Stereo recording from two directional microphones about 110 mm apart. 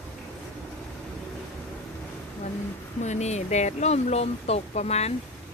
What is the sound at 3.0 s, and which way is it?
Speech, 90° left.